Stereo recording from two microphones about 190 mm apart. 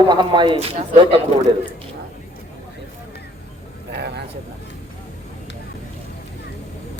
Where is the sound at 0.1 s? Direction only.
25° right (ahead or behind).